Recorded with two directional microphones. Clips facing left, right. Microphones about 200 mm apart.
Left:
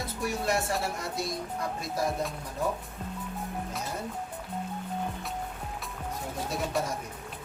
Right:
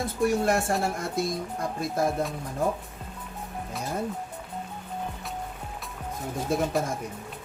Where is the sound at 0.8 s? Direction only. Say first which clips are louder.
Right 5 dB; 50° right (ahead or behind).